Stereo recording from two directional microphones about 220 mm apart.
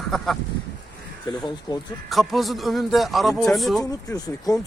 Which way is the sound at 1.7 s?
20° left (ahead or behind).